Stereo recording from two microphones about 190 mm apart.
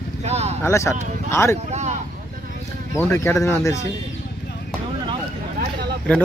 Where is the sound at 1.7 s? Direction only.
35° right (ahead or behind).